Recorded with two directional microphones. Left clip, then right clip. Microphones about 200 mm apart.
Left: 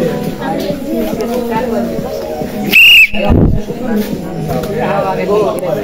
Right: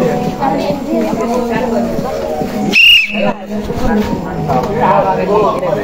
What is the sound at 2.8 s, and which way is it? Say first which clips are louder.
Whistle: left 2 dB; 45° left (ahead or behind).